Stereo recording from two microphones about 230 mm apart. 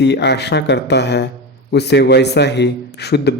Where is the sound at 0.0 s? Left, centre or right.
Left.